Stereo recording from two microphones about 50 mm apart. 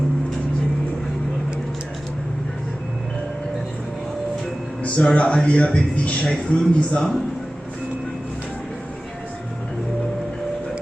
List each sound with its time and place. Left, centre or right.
4.8 s speech: left
6.5 s speech: centre